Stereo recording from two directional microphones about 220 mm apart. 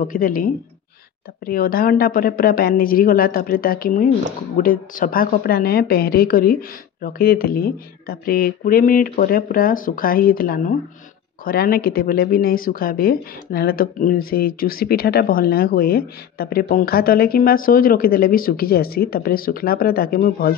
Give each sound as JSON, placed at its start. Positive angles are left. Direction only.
{"t": 0.0, "sound": "a woman's voice", "side_deg": 40}